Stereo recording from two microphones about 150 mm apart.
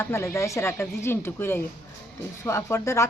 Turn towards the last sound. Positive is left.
turn(degrees=20)  # may be behind; listen again after turning